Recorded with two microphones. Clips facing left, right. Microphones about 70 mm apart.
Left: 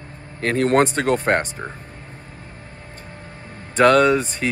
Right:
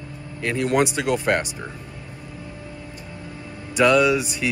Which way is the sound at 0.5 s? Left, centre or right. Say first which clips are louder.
Left 4 dB; left.